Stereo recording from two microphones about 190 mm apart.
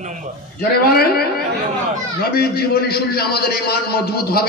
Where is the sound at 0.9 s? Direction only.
55° left (ahead or behind).